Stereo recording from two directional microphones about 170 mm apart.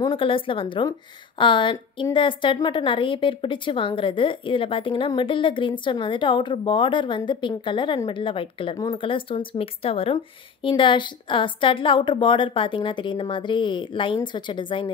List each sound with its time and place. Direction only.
0.0 s a woman's voice: 30° left (ahead or behind)